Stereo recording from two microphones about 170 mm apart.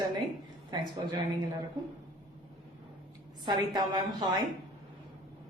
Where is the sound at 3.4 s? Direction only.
25° right (ahead or behind).